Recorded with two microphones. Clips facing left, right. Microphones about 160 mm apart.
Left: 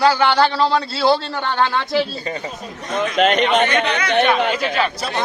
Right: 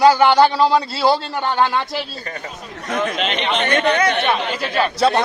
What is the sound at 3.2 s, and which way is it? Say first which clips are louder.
Speech: left 6 dB; 50° left (ahead or behind).